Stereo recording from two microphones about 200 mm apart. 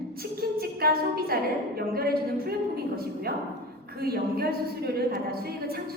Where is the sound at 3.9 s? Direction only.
50° right (ahead or behind).